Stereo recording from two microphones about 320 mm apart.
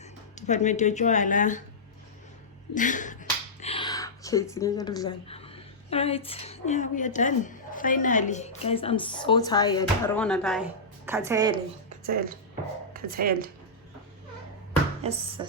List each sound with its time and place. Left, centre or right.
0.3 s speech: left
2.7 s speech: left; by 11.5 s centre
12.9 s speech: right
15.0 s speech: centre